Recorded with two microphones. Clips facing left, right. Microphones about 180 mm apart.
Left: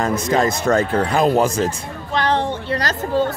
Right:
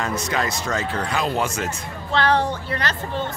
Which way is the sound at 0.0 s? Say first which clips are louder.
Left 7 dB; 45° left (ahead or behind).